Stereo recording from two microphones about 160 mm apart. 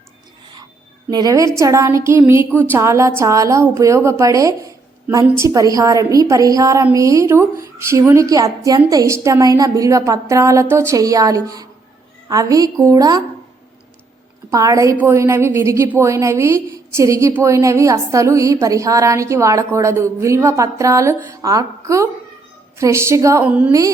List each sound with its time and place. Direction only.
1.1 s a woman's voice: 20° right (ahead or behind)
14.5 s a woman's voice: 20° right (ahead or behind)
23.5 s a woman's voice: 10° right (ahead or behind)